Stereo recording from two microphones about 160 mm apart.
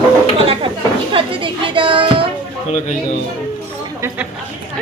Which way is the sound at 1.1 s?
30° right (ahead or behind).